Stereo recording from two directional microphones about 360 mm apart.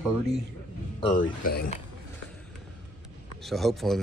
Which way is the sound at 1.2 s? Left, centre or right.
Left.